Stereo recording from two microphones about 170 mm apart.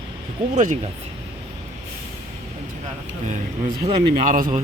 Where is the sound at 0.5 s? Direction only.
45° right (ahead or behind).